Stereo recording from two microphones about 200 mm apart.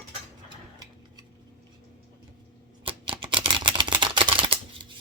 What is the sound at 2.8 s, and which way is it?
Camera, 25° right (ahead or behind).